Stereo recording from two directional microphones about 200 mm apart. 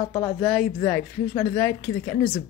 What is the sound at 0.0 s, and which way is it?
Speech, 20° left (ahead or behind).